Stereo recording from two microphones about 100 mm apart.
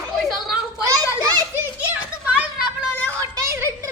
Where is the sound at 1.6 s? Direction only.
15° right (ahead or behind).